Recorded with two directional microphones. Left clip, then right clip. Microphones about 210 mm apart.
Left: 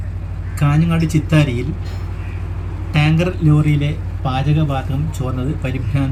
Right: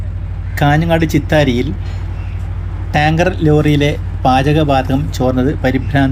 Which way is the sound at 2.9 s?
5° right (ahead or behind).